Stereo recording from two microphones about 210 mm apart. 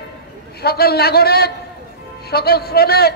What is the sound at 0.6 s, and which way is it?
A man's voice, 50° left (ahead or behind).